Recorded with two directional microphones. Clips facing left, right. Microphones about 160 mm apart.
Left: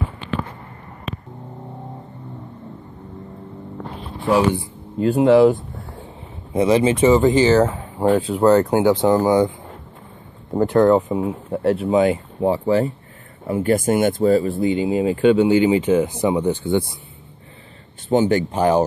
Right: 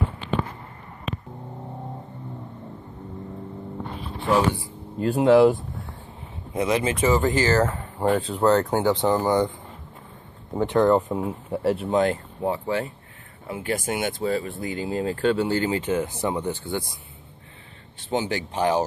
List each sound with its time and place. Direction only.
4.9 s speech: centre (ahead or behind)
6.5 s speech: 30° left (ahead or behind)
7.6 s speech: 5° left (ahead or behind)
10.5 s speech: centre (ahead or behind)
12.4 s speech: 30° left (ahead or behind)
13.5 s speech: 45° left (ahead or behind)
14.6 s speech: 25° left (ahead or behind)
14.9 s speech: 10° left (ahead or behind)
18.0 s speech: 50° left (ahead or behind)